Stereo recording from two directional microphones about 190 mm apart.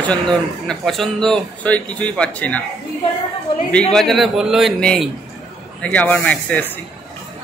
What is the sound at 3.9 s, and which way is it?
Speech, centre (ahead or behind).